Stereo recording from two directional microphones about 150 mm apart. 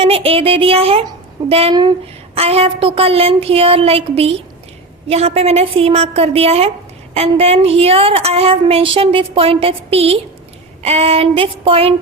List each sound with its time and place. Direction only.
0.0 s a woman's voice: 40° right (ahead or behind)